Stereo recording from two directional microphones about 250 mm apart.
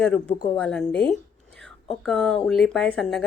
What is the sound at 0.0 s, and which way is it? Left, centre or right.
Speech, centre.